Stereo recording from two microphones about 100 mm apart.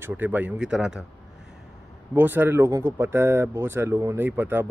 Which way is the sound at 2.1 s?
20° right (ahead or behind).